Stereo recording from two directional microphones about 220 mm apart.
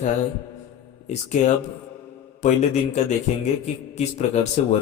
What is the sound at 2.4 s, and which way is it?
Speech, 30° left (ahead or behind).